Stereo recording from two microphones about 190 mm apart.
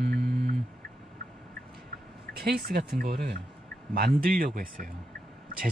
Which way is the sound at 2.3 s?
55° right (ahead or behind).